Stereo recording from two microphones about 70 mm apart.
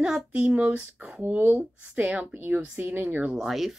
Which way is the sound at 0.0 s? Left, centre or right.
Centre.